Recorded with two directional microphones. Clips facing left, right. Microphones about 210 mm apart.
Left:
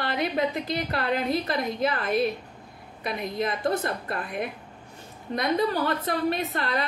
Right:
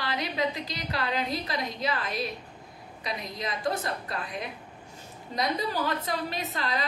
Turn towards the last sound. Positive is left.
turn(degrees=55)  # may be behind; listen again after turning